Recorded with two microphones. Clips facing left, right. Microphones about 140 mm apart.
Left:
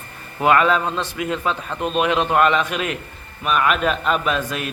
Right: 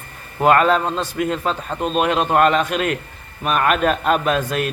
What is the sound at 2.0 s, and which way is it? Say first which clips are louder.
A man's voice: right 1 dB; 45° right (ahead or behind).